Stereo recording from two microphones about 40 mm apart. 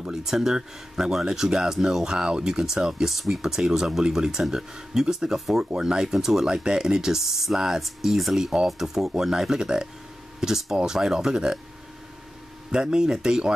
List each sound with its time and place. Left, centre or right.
0.0 s speech: centre
6.5 s speech: centre
12.7 s speech: centre